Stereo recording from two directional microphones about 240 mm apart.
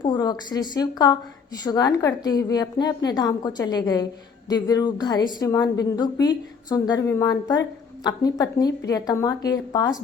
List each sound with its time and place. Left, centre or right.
0.0 s a woman's voice: centre